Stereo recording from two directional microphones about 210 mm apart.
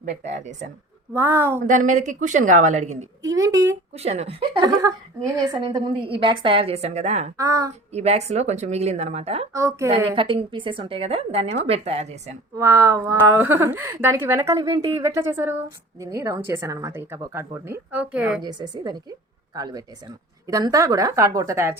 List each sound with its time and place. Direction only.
0.0 s a woman's voice: 35° right (ahead or behind)
1.1 s a woman's voice: 10° right (ahead or behind)
1.6 s a woman's voice: 35° right (ahead or behind)
3.2 s a woman's voice: 15° right (ahead or behind)
3.9 s a woman's voice: 30° right (ahead or behind)
7.3 s a woman's voice: 15° right (ahead or behind)
7.9 s a woman's voice: 30° right (ahead or behind)
9.5 s a woman's voice: 15° right (ahead or behind)
12.5 s a woman's voice: 15° right (ahead or behind)
18.4 s a woman's voice: 20° right (ahead or behind)